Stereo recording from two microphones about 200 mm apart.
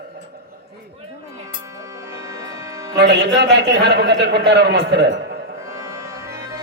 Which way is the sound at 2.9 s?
60° right (ahead or behind).